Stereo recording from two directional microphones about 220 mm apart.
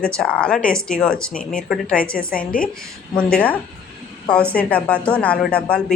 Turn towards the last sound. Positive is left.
turn(degrees=5)  # may be behind; listen again after turning